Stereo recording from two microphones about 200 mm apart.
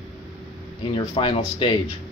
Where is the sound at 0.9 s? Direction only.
25° left (ahead or behind).